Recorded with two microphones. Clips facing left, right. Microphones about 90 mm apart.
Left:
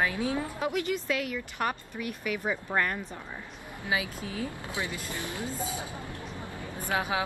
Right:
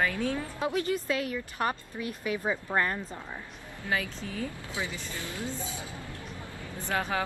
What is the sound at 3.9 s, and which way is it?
Speech, 5° left (ahead or behind).